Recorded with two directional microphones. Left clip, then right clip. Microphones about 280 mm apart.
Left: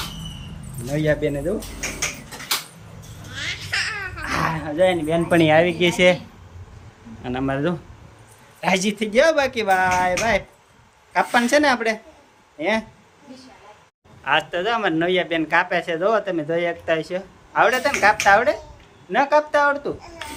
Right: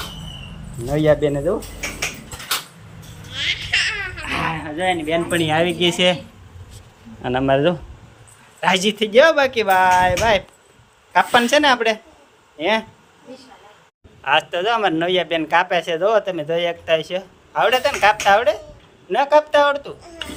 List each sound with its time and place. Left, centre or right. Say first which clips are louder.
0.9 s speech: right 5 dB; centre
3.3 s baby cry: right 5 dB; centre
4.3 s a sound: left 1 dB; centre
5.0 s speech: even; left
5.4 s speech: left 4 dB; centre
7.2 s speech: right 7 dB; centre
14.3 s a man's voice: right 3 dB; right